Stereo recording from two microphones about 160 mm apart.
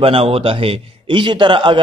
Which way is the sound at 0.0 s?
35° right (ahead or behind).